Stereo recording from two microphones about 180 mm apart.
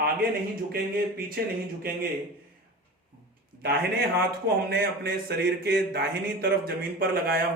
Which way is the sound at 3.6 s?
60° right (ahead or behind).